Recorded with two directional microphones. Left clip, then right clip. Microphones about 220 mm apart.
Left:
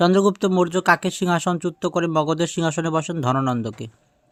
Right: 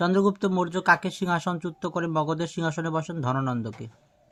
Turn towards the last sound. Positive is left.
turn(degrees=40)  # may be behind; listen again after turning